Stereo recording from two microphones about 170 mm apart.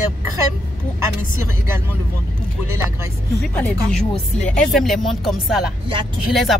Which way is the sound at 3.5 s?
5° left (ahead or behind).